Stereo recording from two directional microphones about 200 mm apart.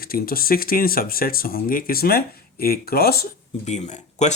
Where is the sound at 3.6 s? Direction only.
35° left (ahead or behind).